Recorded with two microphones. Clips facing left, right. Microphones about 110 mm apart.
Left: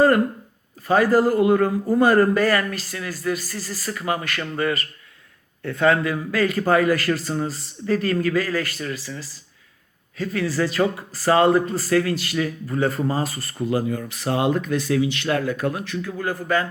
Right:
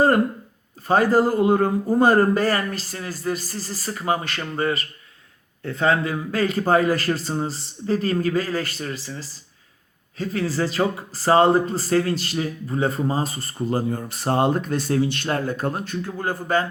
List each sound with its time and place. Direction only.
0.9 s a man's voice: 30° right (ahead or behind)